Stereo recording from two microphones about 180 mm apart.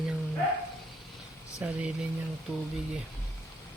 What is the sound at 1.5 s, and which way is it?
Speech, 5° right (ahead or behind).